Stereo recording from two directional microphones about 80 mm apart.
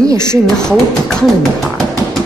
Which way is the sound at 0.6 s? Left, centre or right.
Centre.